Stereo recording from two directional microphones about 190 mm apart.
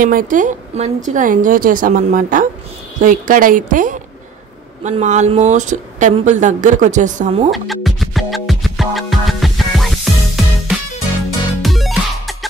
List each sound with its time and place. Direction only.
0.0 s a woman's voice: 45° right (ahead or behind)
7.5 s music: centre (ahead or behind)